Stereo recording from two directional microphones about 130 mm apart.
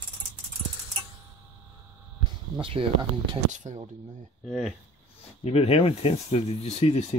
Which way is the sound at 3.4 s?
70° right (ahead or behind).